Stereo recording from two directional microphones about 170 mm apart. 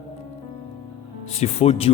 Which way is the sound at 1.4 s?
35° left (ahead or behind).